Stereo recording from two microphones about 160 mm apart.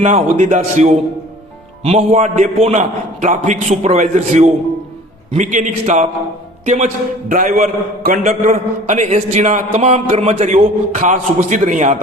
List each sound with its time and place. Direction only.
0.0 s a man's voice: 50° right (ahead or behind)
1.8 s a man's voice: 40° right (ahead or behind)
7.3 s a man's voice: 60° right (ahead or behind)